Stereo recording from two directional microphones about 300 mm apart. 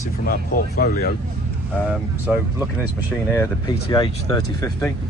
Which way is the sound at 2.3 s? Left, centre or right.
Centre.